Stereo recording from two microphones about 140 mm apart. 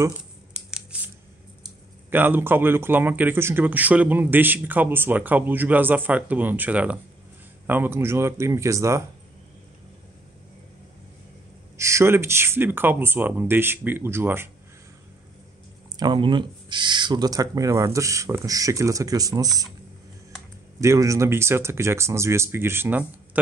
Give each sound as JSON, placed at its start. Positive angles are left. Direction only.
{"t": 0.2, "sound": "scissors", "side_deg": -5}
{"t": 2.0, "sound": "speech", "side_deg": -15}
{"t": 11.7, "sound": "speech", "side_deg": -20}
{"t": 16.0, "sound": "speech", "side_deg": -35}
{"t": 20.8, "sound": "speech", "side_deg": -20}